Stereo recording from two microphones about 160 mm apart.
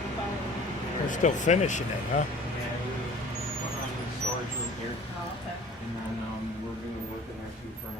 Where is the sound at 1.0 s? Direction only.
50° left (ahead or behind).